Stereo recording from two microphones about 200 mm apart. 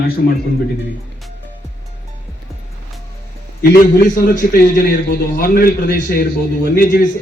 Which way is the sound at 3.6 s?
45° left (ahead or behind).